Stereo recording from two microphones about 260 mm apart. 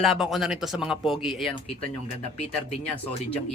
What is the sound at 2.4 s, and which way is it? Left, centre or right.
Speech, left.